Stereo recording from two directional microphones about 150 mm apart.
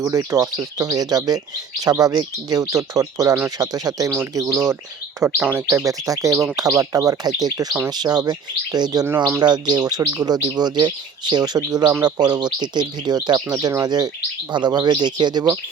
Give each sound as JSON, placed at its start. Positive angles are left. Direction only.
{"t": 0.0, "sound": "speech", "side_deg": -20}